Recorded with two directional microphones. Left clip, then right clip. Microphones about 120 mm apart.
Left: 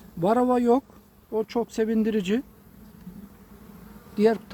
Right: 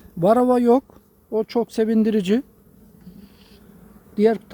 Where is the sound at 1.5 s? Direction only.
90° right.